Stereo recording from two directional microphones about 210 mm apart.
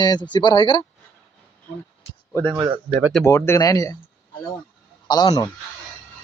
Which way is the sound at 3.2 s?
10° left (ahead or behind).